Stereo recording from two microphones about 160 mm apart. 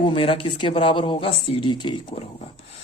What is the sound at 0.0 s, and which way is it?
Speech, 35° left (ahead or behind).